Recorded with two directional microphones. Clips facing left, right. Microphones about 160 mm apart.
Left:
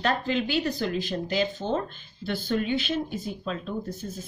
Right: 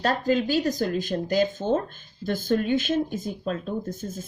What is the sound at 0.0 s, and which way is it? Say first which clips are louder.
Speech: right 3 dB; 40° right (ahead or behind).